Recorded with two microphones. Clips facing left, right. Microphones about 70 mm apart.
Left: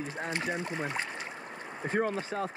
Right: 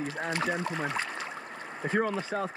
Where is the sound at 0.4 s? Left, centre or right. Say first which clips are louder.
Right 3 dB; right.